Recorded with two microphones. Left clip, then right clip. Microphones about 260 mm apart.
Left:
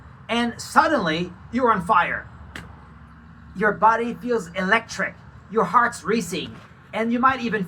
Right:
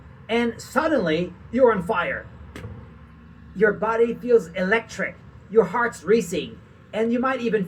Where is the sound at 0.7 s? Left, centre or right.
Centre.